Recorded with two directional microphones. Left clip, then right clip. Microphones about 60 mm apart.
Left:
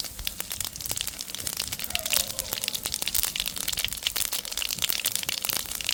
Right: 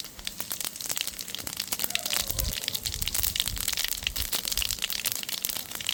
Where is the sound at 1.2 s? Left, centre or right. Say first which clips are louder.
Left 2 dB; left.